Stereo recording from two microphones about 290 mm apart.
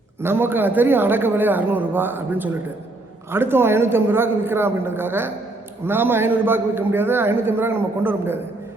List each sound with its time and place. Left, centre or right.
0.2 s a man's voice: centre